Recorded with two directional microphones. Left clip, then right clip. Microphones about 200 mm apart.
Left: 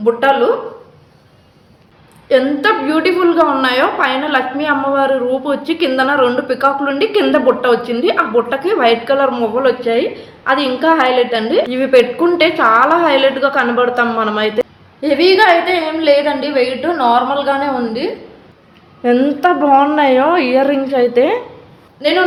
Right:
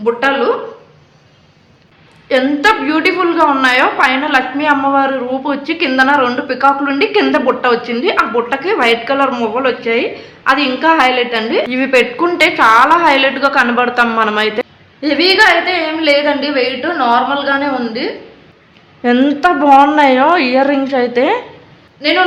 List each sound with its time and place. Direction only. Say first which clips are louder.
0.0 s a woman's voice: left 1 dB; 15° right (ahead or behind)
2.3 s a woman's voice: right 1 dB; 15° right (ahead or behind)
19.0 s a woman's voice: right 1 dB; 30° right (ahead or behind)